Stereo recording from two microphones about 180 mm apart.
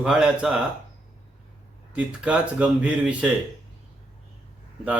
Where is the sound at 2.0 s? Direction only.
5° right (ahead or behind).